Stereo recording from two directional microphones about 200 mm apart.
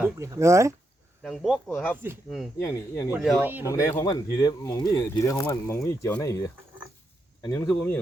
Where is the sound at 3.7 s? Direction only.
15° left (ahead or behind).